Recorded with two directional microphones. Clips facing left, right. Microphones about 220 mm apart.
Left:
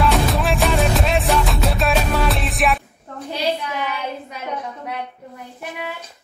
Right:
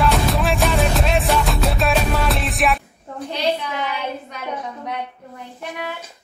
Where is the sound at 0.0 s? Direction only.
Centre (ahead or behind).